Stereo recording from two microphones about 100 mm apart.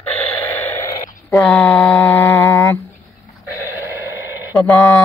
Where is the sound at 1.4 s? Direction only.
15° left (ahead or behind).